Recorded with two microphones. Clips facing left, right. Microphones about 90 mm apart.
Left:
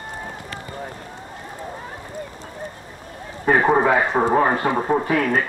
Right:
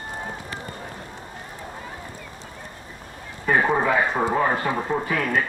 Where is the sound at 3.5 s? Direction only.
45° left (ahead or behind).